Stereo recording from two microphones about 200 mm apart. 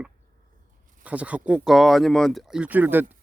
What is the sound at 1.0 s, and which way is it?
Speech, 5° right (ahead or behind).